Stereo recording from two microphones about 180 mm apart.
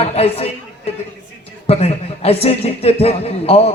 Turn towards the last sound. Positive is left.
turn(degrees=35)  # may be behind; listen again after turning